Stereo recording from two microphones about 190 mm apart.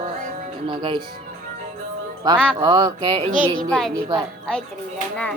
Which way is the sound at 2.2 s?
20° right (ahead or behind).